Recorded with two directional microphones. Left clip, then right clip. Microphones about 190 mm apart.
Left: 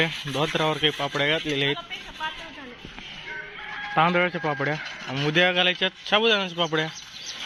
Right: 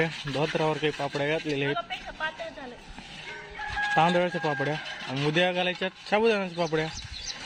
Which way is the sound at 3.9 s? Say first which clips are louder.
Left 3 dB; 5° right (ahead or behind).